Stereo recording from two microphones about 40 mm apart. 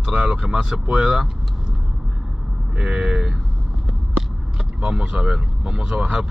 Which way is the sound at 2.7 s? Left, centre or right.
Right.